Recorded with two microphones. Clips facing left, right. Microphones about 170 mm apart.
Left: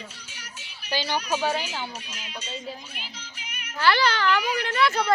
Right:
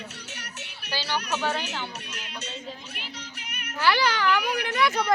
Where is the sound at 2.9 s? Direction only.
65° right (ahead or behind).